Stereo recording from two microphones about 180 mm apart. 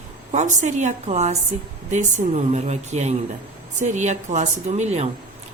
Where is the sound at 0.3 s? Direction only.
40° right (ahead or behind).